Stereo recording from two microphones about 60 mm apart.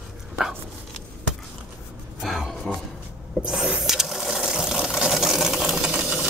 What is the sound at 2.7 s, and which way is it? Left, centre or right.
Speech, centre.